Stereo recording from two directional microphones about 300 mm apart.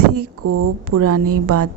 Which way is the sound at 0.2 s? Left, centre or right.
Right.